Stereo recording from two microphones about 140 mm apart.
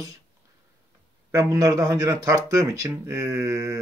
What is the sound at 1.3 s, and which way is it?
Speech, 20° right (ahead or behind).